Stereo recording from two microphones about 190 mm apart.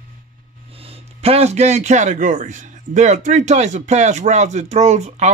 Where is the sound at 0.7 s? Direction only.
30° right (ahead or behind).